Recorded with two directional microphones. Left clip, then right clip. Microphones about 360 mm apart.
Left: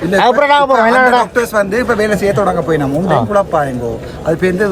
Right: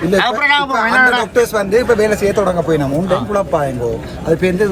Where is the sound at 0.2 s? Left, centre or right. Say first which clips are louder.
Left 6 dB; centre.